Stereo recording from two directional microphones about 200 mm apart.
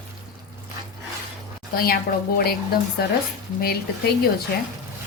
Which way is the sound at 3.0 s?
50° left (ahead or behind).